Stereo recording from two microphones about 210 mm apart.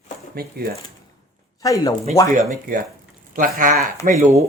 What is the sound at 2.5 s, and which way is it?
Speech, 40° right (ahead or behind).